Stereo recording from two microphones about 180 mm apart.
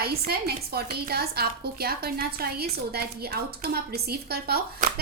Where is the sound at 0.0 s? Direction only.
60° right (ahead or behind).